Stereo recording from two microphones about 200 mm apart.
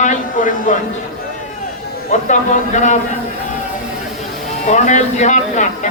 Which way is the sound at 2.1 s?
40° left (ahead or behind).